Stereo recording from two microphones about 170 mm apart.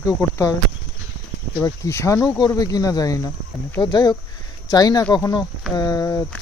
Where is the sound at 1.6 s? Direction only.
15° left (ahead or behind).